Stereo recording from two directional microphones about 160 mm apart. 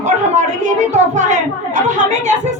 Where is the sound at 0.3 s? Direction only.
45° right (ahead or behind).